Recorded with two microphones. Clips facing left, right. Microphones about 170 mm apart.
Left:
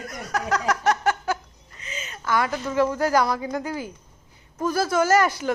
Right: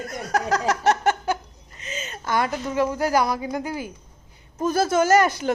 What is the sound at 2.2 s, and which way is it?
A woman's voice, 20° right (ahead or behind).